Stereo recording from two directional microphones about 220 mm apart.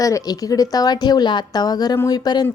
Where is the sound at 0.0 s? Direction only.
15° left (ahead or behind).